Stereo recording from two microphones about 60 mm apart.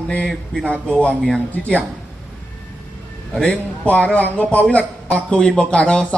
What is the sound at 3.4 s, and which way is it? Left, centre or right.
Speech, left.